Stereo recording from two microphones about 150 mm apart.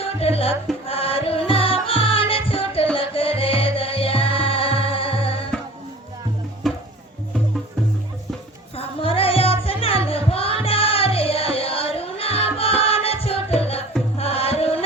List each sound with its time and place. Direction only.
0.0 s music: 40° left (ahead or behind)
6.6 s music: centre (ahead or behind)
8.7 s music: 40° left (ahead or behind)